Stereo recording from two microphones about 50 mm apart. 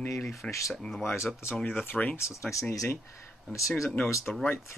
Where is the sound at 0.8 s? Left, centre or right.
Centre.